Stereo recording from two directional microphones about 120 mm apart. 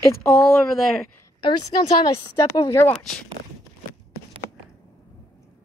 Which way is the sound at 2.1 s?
30° left (ahead or behind).